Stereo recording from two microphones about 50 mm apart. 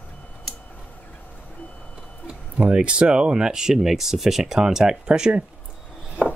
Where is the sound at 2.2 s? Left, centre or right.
Right.